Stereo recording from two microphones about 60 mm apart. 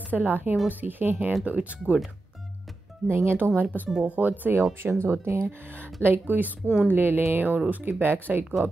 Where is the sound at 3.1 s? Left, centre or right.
Right.